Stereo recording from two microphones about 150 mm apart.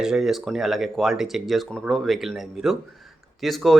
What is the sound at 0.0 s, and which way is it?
Speech, 5° right (ahead or behind).